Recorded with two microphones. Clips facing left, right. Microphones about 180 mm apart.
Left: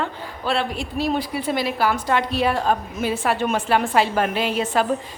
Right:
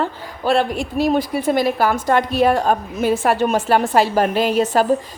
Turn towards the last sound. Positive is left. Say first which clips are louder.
# right 5 dB
turn(degrees=-40)  # may be behind; listen again after turning